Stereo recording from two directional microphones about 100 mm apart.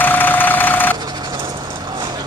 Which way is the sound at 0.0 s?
20° left (ahead or behind).